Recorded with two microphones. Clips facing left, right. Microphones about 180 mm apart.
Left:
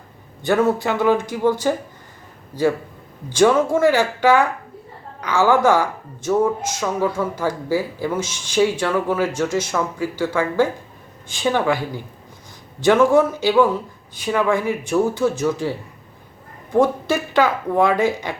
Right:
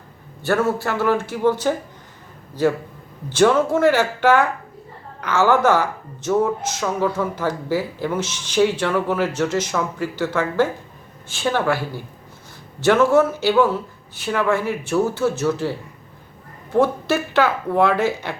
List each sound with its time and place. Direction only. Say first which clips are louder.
0.4 s speech: left 2 dB; 15° left (ahead or behind)
12.8 s speech: left 1 dB; 15° left (ahead or behind)
16.7 s speech: left 1 dB; 15° left (ahead or behind)